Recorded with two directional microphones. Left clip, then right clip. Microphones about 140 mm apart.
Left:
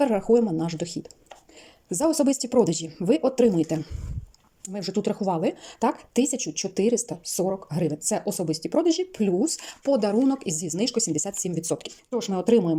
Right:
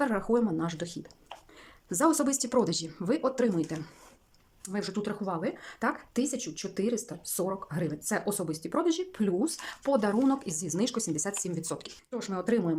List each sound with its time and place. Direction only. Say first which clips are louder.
0.0 s speech: left 7 dB; 10° left (ahead or behind)